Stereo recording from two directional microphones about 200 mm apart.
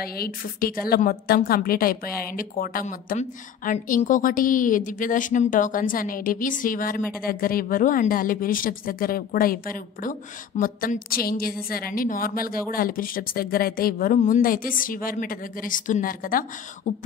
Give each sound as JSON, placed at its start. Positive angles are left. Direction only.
{"t": 0.0, "sound": "a woman's voice", "side_deg": 50}
{"t": 16.9, "sound": "beatboxing", "side_deg": 40}